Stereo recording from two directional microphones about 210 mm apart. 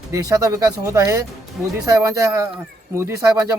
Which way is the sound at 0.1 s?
15° right (ahead or behind).